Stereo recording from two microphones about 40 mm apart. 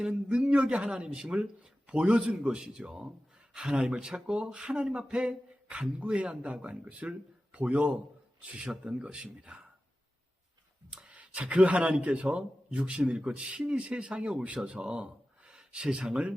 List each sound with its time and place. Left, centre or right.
0.3 s a man's voice: right
10.9 s speech: right